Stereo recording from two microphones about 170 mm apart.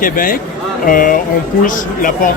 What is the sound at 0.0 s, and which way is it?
Speech, 55° left (ahead or behind).